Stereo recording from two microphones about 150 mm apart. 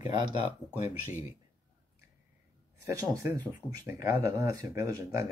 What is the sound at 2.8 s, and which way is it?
Speech, 20° right (ahead or behind).